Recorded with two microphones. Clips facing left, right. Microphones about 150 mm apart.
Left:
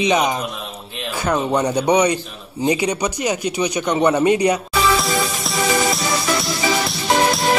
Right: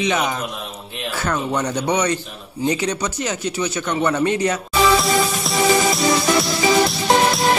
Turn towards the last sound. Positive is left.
turn(degrees=0)  # may be behind; listen again after turning